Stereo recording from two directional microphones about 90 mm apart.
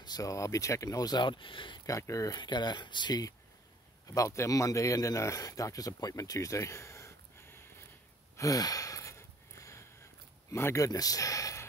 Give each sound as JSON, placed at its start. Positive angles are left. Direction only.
{"t": 0.0, "sound": "speech", "side_deg": 45}
{"t": 1.9, "sound": "speech", "side_deg": 35}
{"t": 2.4, "sound": "speech", "side_deg": 55}
{"t": 8.4, "sound": "gasp", "side_deg": 45}
{"t": 10.5, "sound": "speech", "side_deg": 30}